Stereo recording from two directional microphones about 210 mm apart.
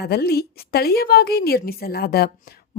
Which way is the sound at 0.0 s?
50° left (ahead or behind).